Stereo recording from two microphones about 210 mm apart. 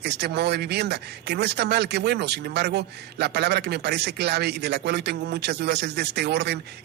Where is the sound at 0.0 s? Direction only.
50° right (ahead or behind).